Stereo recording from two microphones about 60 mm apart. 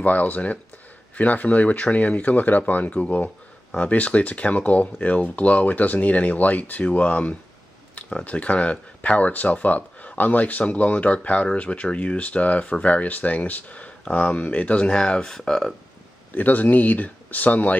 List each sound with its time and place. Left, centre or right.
0.0 s speech: left; by 15.7 s centre
16.3 s speech: left